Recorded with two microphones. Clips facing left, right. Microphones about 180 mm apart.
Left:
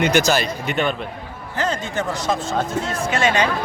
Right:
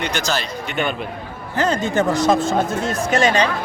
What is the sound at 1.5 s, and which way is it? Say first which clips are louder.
A man's voice: right 5 dB; 40° right (ahead or behind).